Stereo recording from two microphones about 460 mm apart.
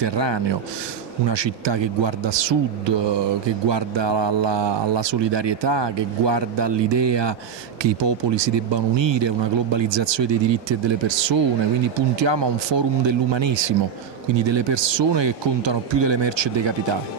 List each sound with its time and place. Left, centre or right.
0.0 s speech: right